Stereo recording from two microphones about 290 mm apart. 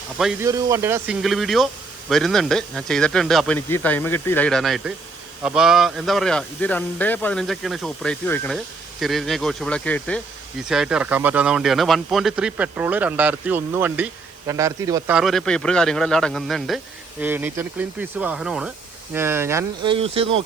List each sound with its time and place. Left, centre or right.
0.2 s speech: centre